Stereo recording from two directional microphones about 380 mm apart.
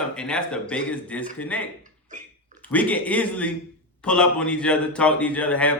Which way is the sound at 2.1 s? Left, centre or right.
Centre.